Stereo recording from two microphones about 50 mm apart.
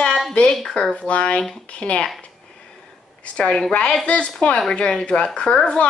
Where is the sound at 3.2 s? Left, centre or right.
Left.